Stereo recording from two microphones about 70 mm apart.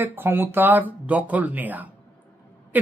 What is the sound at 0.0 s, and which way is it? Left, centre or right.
A man's voice, right.